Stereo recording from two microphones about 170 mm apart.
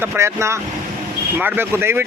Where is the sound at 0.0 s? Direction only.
15° right (ahead or behind).